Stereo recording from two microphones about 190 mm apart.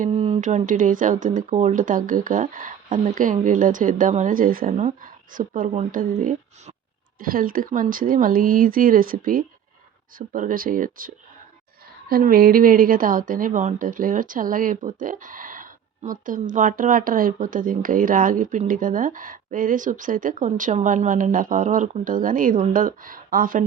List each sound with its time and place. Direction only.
0.0 s a woman's voice: 35° right (ahead or behind)